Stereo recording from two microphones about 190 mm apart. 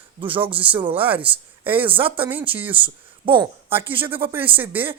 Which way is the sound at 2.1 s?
10° right (ahead or behind).